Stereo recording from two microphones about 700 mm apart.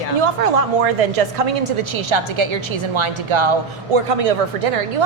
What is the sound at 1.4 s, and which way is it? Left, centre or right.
A woman's voice, right.